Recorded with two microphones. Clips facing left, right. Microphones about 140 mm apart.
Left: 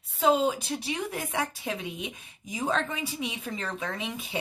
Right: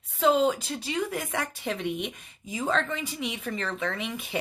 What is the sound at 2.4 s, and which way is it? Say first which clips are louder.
Speech: right 1 dB; 15° left (ahead or behind).